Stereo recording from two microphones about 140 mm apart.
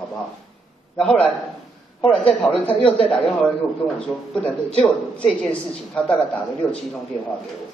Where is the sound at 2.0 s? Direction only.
10° left (ahead or behind).